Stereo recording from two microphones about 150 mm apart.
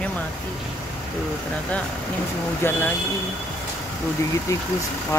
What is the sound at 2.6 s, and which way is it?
Speech, 15° left (ahead or behind).